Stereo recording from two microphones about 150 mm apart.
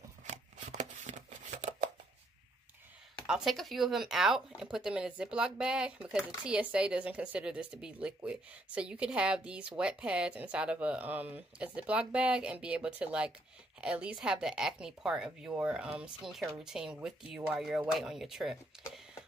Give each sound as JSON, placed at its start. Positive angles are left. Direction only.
{"t": 0.2, "sound": "shuffling cards", "side_deg": -50}
{"t": 3.3, "sound": "speech", "side_deg": 0}